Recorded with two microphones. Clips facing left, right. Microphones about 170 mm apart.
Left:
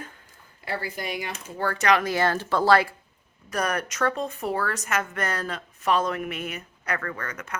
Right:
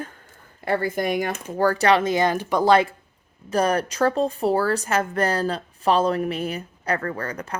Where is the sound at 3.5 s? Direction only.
30° right (ahead or behind).